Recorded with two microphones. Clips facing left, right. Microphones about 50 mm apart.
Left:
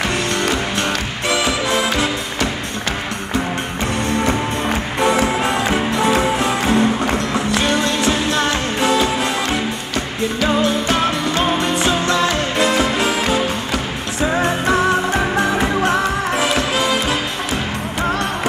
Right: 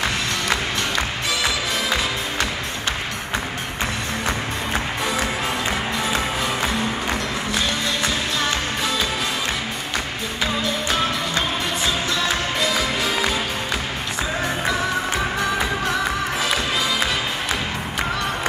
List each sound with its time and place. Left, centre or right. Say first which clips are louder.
1.3 s music: left 7 dB; left
5.0 s music: left 12 dB; left
10.4 s music: left 6 dB; left
16.3 s music: left 5 dB; left